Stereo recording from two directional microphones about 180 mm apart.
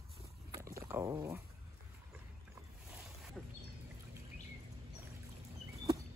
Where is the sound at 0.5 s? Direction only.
15° right (ahead or behind).